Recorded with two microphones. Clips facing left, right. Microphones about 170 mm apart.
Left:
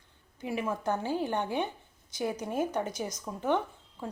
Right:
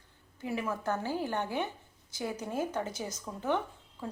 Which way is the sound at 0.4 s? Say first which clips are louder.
Left 2 dB; 15° left (ahead or behind).